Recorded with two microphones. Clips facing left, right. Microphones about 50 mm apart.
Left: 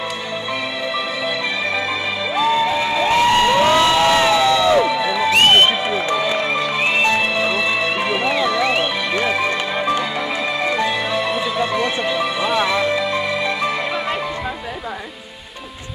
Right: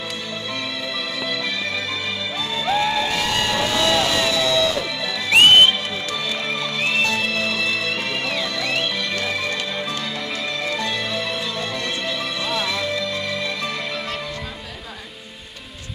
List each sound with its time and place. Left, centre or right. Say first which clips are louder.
2.3 s music: left 6 dB; centre
3.1 s a sound: left 8 dB; left
4.8 s music: left 9 dB; centre
5.3 s music: right 1 dB; centre
6.0 s music: left 7 dB; left